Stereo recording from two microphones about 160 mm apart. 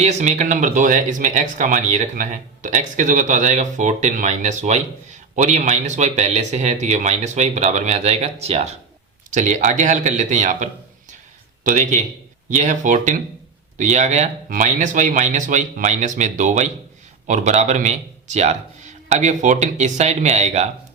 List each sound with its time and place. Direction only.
0.0 s speech: 45° right (ahead or behind)